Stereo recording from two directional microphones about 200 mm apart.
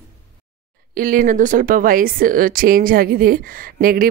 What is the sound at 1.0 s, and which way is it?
Speech, 45° right (ahead or behind).